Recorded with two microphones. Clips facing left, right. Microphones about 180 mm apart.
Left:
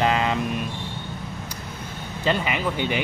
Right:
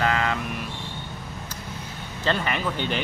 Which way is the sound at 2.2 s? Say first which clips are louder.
Left 2 dB; 10° left (ahead or behind).